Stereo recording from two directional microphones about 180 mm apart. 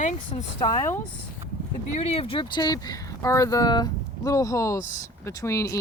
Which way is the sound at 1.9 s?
35° left (ahead or behind).